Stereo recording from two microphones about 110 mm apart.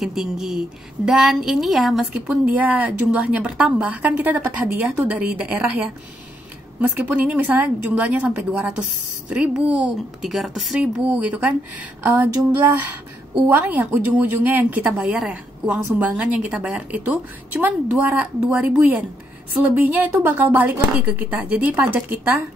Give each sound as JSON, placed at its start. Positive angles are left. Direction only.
{"t": 0.0, "sound": "a woman's voice", "side_deg": -5}
{"t": 6.8, "sound": "a woman's voice", "side_deg": -15}
{"t": 11.1, "sound": "a woman's voice", "side_deg": -15}
{"t": 13.5, "sound": "a woman's voice", "side_deg": -15}